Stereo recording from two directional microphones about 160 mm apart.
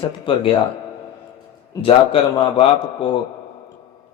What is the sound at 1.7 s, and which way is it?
Speech, 20° left (ahead or behind).